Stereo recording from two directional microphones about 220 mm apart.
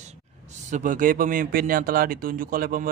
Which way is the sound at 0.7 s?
35° right (ahead or behind).